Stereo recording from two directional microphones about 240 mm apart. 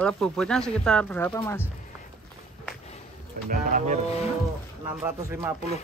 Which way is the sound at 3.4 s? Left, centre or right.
Right.